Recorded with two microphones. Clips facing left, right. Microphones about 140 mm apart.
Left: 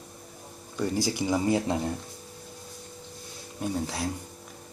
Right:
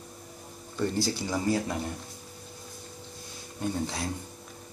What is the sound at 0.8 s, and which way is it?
Speech, 15° left (ahead or behind).